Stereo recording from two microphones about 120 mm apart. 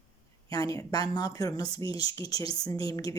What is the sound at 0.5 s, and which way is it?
Speech, 30° left (ahead or behind).